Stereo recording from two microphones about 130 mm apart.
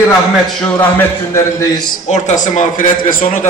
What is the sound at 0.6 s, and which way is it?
Speech, 15° left (ahead or behind).